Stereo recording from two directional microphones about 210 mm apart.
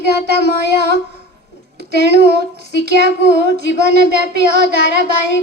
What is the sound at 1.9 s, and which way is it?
Speech, 55° left (ahead or behind).